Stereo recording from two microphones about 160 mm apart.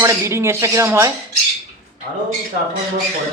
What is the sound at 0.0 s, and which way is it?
A man's voice, 20° right (ahead or behind).